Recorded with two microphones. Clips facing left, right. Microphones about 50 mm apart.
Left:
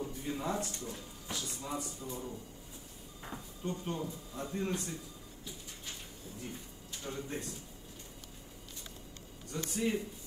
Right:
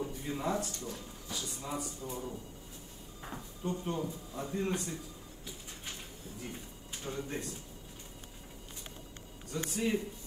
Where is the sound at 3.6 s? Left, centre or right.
Right.